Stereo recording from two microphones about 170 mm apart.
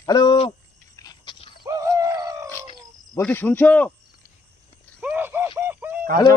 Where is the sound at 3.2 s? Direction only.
10° left (ahead or behind).